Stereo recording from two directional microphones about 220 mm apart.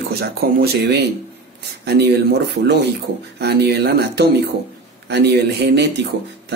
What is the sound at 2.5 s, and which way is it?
Speech, 50° right (ahead or behind).